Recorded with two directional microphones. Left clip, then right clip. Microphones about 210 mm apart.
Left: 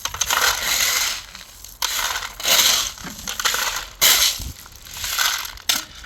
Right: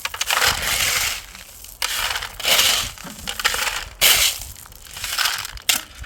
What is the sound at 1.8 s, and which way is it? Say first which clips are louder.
Crushing: even; 20° right (ahead or behind).